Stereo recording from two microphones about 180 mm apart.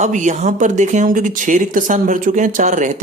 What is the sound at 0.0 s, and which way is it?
Speech, 40° right (ahead or behind).